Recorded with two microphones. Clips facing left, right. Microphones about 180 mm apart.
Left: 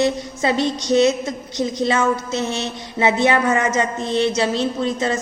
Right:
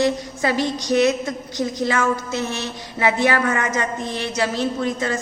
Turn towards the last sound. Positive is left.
turn(degrees=25)  # may be behind; listen again after turning